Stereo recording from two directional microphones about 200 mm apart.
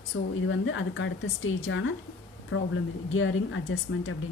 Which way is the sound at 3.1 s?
75° left (ahead or behind).